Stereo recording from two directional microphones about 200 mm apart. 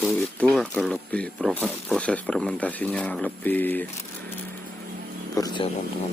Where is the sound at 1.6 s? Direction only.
5° right (ahead or behind).